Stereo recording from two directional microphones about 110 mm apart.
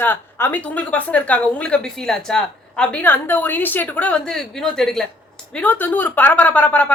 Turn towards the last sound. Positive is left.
turn(degrees=15)  # may be behind; listen again after turning